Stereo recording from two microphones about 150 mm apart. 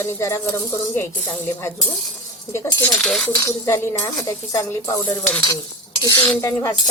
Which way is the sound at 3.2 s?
25° left (ahead or behind).